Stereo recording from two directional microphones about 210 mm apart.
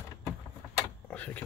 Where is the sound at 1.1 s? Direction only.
5° left (ahead or behind).